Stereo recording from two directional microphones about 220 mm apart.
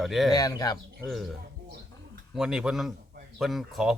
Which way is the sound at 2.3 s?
Centre (ahead or behind).